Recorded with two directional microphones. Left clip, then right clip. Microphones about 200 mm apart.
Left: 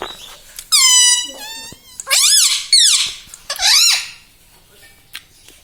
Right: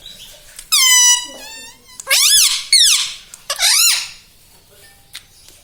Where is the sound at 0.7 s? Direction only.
15° right (ahead or behind).